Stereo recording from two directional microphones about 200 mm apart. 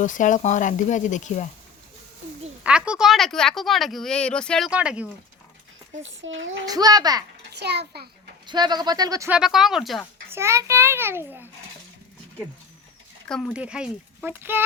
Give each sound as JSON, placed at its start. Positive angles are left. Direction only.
{"t": 0.0, "sound": "speech", "side_deg": 40}
{"t": 2.6, "sound": "speech", "side_deg": -5}
{"t": 6.0, "sound": "a child's voice", "side_deg": -70}
{"t": 6.7, "sound": "speech", "side_deg": -20}
{"t": 7.5, "sound": "a child's voice", "side_deg": -55}
{"t": 8.4, "sound": "speech", "side_deg": -20}
{"t": 9.4, "sound": "speech", "side_deg": 0}
{"t": 10.2, "sound": "a child's voice", "side_deg": -15}
{"t": 13.2, "sound": "speech", "side_deg": 0}